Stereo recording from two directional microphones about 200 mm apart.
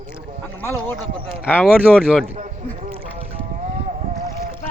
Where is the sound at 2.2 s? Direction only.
35° right (ahead or behind).